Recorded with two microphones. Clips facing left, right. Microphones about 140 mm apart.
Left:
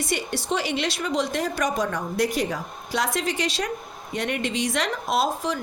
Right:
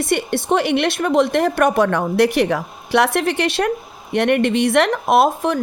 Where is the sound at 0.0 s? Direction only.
60° right (ahead or behind).